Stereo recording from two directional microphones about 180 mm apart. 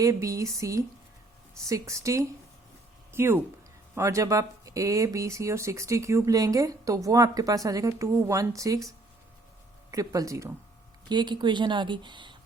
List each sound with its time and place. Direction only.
0.0 s speech: 15° right (ahead or behind)
9.9 s speech: 20° right (ahead or behind)